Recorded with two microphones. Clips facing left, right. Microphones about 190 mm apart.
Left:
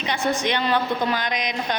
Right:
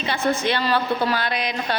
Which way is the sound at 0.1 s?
15° left (ahead or behind).